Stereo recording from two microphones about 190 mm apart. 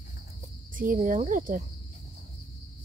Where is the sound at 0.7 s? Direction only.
45° right (ahead or behind).